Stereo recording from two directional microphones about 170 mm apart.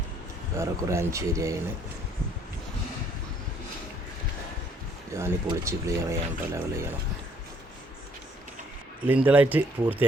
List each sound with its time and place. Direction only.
0.5 s speech: 15° right (ahead or behind)
5.1 s speech: 15° right (ahead or behind)
9.0 s speech: 10° right (ahead or behind)